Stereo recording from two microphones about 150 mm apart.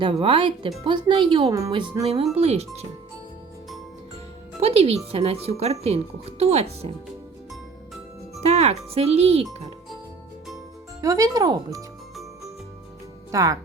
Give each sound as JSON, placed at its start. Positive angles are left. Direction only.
{"t": 0.0, "sound": "speech", "side_deg": -40}
{"t": 2.0, "sound": "speech", "side_deg": -45}
{"t": 4.6, "sound": "speech", "side_deg": -40}
{"t": 8.4, "sound": "speech", "side_deg": -45}
{"t": 11.0, "sound": "speech", "side_deg": -20}
{"t": 13.3, "sound": "speech", "side_deg": -25}